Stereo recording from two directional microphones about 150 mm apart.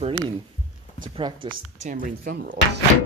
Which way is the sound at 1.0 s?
30° right (ahead or behind).